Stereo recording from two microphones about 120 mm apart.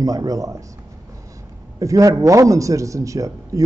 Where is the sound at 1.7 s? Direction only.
30° right (ahead or behind).